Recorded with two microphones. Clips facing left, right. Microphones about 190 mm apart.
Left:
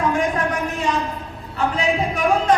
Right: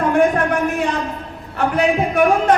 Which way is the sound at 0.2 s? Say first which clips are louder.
Right 6 dB; 60° right (ahead or behind).